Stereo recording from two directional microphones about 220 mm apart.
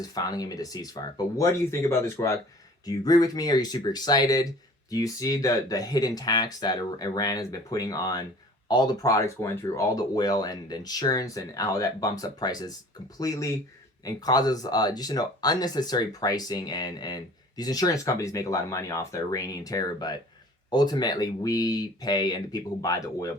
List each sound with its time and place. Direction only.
0.0 s speech: 15° left (ahead or behind)